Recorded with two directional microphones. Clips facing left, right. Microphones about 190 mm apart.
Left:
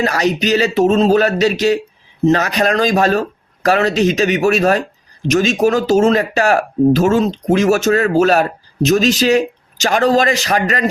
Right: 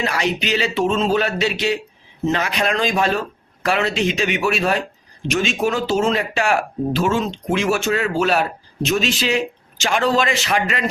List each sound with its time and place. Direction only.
0.0 s speech: 40° left (ahead or behind)